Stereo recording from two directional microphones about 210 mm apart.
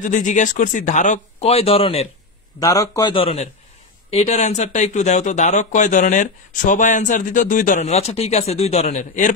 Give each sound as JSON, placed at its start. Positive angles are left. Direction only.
{"t": 0.0, "sound": "speech", "side_deg": 35}
{"t": 2.6, "sound": "a man's voice", "side_deg": 15}